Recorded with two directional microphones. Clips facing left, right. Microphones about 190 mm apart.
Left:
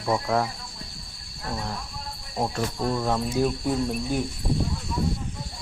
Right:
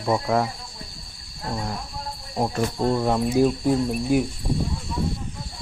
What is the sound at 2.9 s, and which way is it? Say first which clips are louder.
Cricket: right 4 dB; 15° right (ahead or behind).